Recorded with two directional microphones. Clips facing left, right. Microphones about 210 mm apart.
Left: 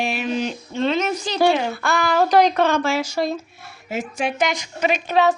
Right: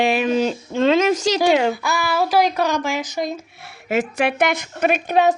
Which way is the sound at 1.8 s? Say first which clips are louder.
Left 2 dB; 5° right (ahead or behind).